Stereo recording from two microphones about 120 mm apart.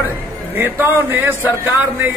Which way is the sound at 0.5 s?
20° right (ahead or behind).